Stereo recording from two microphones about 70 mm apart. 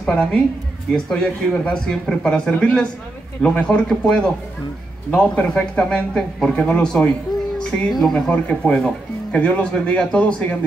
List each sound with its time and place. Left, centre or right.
0.0 s speech: centre